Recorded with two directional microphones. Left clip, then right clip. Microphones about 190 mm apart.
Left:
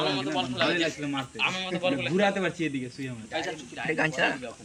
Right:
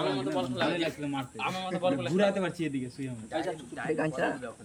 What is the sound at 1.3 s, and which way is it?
A man's voice, 50° right (ahead or behind).